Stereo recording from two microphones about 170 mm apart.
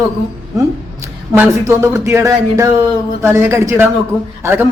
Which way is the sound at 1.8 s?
15° right (ahead or behind).